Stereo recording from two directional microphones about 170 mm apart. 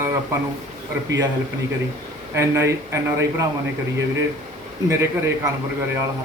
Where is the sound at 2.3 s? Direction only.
15° right (ahead or behind).